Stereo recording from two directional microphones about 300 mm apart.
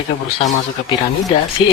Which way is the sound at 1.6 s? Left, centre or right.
Centre.